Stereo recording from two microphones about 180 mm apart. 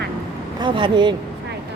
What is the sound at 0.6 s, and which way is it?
Speech, 25° right (ahead or behind).